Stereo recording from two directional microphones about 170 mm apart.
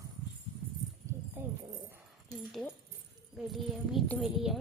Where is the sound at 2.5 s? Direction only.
Centre (ahead or behind).